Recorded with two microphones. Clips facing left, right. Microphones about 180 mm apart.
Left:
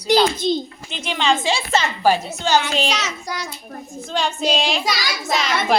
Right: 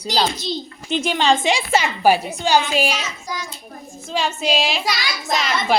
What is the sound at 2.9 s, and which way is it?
Child singing, 75° left (ahead or behind).